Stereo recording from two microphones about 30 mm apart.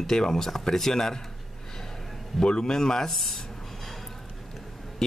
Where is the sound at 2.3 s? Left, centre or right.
Left.